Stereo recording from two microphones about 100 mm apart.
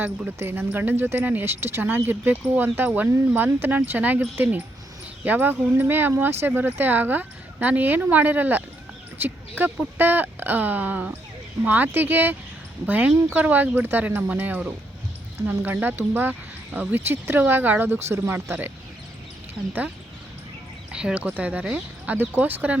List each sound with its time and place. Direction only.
0.0 s speech: 20° right (ahead or behind)
20.9 s speech: 10° right (ahead or behind)